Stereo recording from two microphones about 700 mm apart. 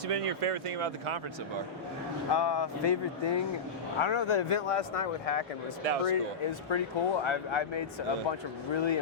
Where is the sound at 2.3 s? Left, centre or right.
Left.